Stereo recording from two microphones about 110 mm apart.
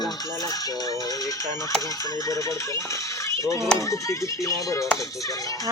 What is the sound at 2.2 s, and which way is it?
A child's voice, 30° left (ahead or behind).